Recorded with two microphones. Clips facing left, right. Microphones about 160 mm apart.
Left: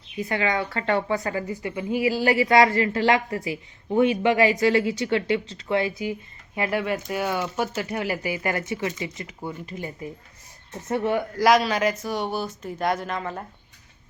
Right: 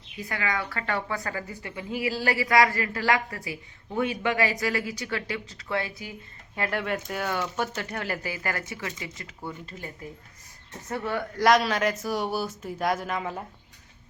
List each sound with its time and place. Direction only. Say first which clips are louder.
0.2 s a woman's voice: left 6 dB; 25° left (ahead or behind)
6.6 s a woman's voice: left 4 dB; 10° left (ahead or behind)
11.3 s speech: left 1 dB; centre (ahead or behind)